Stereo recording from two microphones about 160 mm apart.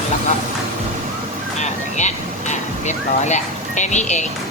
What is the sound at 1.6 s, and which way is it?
Speech, 45° left (ahead or behind).